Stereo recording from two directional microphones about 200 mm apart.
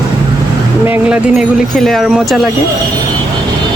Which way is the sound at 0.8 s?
10° right (ahead or behind).